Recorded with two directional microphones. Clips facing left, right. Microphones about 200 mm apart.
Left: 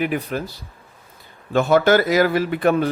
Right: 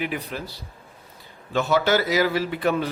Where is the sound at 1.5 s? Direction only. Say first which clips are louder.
Left 5 dB; 50° left (ahead or behind).